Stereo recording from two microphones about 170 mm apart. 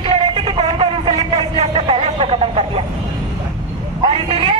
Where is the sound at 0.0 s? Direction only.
35° right (ahead or behind).